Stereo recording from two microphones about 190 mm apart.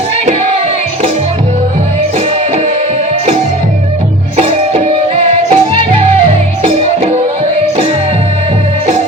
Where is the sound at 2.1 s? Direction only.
30° right (ahead or behind).